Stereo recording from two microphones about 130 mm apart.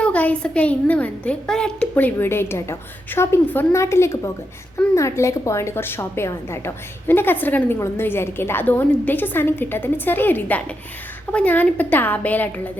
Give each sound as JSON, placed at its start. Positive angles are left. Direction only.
{"t": 0.0, "sound": "a woman's voice", "side_deg": 10}